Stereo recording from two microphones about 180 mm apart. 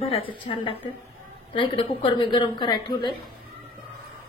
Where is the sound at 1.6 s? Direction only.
25° left (ahead or behind).